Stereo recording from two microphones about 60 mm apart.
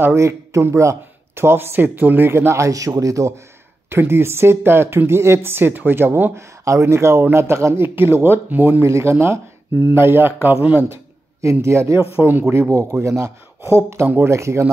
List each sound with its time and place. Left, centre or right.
0.0 s speech: right
3.9 s speech: right
6.6 s speech: right
8.8 s speech: right
11.6 s speech: right
13.6 s speech: right